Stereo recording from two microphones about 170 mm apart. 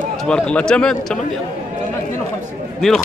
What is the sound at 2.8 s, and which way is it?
Speech, centre (ahead or behind).